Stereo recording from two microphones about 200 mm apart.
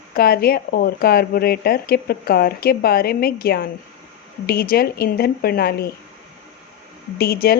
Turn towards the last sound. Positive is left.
turn(degrees=50)  # may be behind; listen again after turning